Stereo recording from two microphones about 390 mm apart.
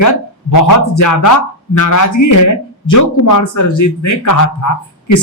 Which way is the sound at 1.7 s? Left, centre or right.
Left.